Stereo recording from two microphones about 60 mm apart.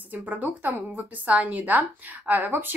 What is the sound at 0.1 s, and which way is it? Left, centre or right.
A woman's voice, right.